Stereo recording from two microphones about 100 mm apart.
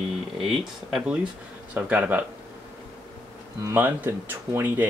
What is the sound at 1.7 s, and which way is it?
Speech, 15° right (ahead or behind).